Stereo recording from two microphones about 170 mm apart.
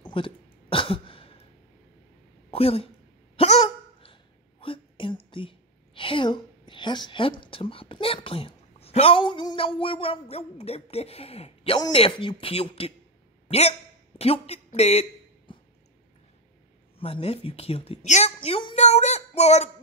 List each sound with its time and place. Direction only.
0.0 s a sound: 30° left (ahead or behind)
2.5 s speech: 35° left (ahead or behind)
3.3 s hiccup: 35° left (ahead or behind)
5.3 s a woman's voice: 30° left (ahead or behind)
17.0 s a woman's voice: 35° left (ahead or behind)